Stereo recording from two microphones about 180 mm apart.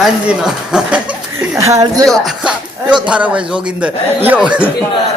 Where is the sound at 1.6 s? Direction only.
20° right (ahead or behind).